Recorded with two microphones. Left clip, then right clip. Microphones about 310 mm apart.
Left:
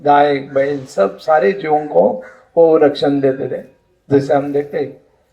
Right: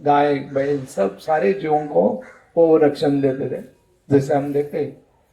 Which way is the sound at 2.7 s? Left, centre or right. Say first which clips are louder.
Left 4 dB; left.